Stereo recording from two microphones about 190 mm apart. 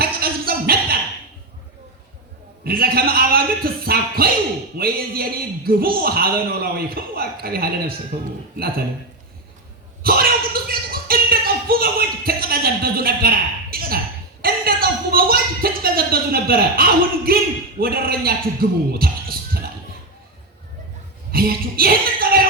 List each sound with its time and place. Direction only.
0.0 s a sound: 50° right (ahead or behind)
2.6 s a woman's voice: 55° right (ahead or behind)
10.0 s a woman's voice: 50° right (ahead or behind)
21.3 s a woman's voice: 50° right (ahead or behind)